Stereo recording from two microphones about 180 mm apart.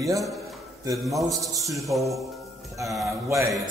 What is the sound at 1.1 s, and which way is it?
A man's voice, centre (ahead or behind).